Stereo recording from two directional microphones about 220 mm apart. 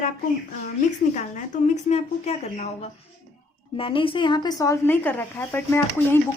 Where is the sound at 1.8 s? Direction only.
30° left (ahead or behind).